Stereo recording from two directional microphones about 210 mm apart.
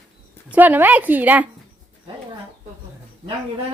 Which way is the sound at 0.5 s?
10° right (ahead or behind).